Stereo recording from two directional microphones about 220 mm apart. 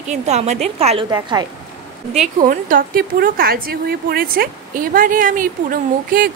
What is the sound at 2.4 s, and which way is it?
A woman's voice, 40° right (ahead or behind).